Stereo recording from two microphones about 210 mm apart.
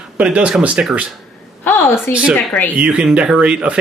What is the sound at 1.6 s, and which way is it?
Speech, 10° left (ahead or behind).